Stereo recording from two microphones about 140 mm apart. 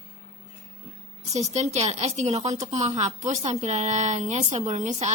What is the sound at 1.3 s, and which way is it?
A woman's voice, 55° right (ahead or behind).